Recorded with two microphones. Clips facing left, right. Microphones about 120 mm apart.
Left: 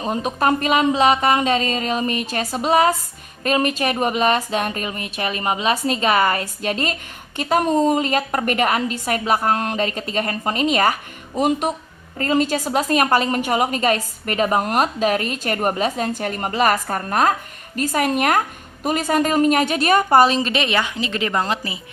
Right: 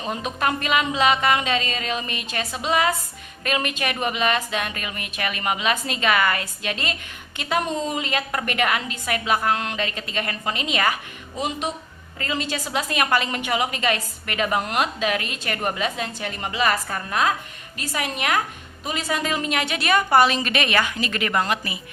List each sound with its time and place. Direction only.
0.0 s a woman's voice: 40° left (ahead or behind)